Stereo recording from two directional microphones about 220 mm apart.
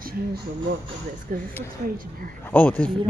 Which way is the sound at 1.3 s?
40° right (ahead or behind).